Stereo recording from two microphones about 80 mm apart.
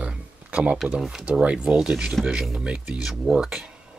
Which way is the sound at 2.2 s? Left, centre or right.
Centre.